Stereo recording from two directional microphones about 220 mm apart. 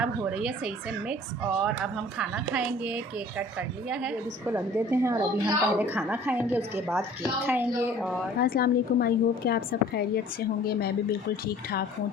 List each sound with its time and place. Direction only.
0.0 s a woman's voice: 5° right (ahead or behind)
8.4 s a woman's voice: 45° left (ahead or behind)